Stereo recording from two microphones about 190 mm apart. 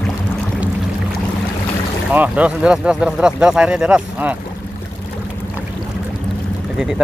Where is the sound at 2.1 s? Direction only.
5° right (ahead or behind).